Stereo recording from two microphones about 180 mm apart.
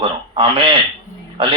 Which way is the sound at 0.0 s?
30° right (ahead or behind).